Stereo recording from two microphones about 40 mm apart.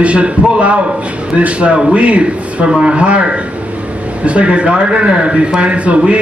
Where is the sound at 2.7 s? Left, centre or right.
Right.